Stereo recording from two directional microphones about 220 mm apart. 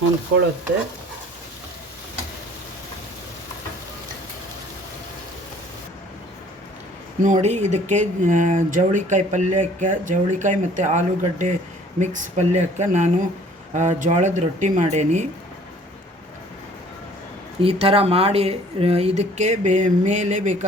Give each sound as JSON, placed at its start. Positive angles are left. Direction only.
{"t": 7.2, "sound": "speech", "side_deg": -35}
{"t": 17.6, "sound": "speech", "side_deg": -25}